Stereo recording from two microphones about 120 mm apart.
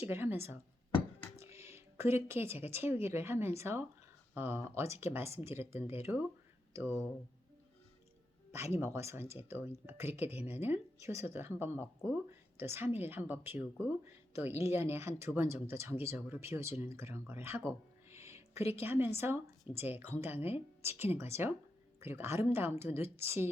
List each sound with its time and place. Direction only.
0.0 s speech: 20° right (ahead or behind)
8.8 s speech: 20° right (ahead or behind)